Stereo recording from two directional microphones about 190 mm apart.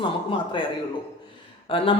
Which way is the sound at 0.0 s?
25° left (ahead or behind).